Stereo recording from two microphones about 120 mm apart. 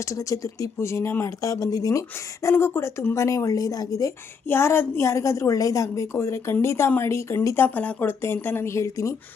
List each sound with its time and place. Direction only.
0.0 s speech: 25° left (ahead or behind)